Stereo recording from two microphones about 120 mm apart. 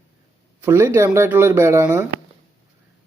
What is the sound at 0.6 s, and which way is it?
Speech, 20° right (ahead or behind).